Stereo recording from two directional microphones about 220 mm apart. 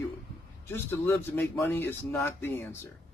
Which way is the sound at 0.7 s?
10° left (ahead or behind).